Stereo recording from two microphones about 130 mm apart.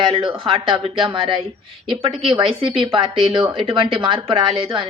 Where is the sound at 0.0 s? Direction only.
40° right (ahead or behind).